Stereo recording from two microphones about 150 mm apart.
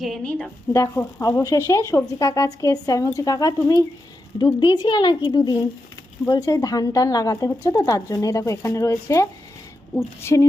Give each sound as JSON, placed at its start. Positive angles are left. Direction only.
{"t": 0.0, "sound": "a woman's voice", "side_deg": 5}
{"t": 0.7, "sound": "speech", "side_deg": 20}